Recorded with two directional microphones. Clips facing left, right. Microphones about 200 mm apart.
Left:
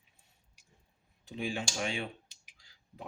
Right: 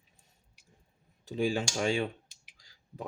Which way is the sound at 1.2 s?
40° right (ahead or behind).